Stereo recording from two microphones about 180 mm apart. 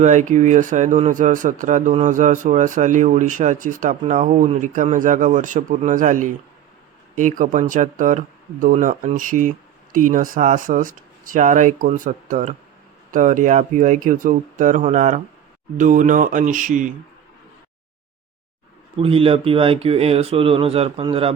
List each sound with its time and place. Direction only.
0.0 s speech: 40° right (ahead or behind)
18.9 s speech: 30° right (ahead or behind)